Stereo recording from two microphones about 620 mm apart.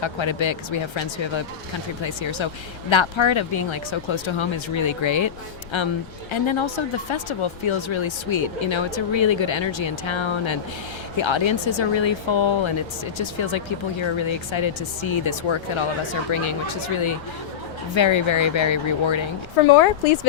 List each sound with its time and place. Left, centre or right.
0.0 s speech: left